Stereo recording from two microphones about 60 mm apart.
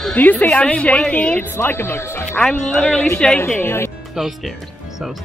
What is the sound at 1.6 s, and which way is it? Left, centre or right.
Speech, left.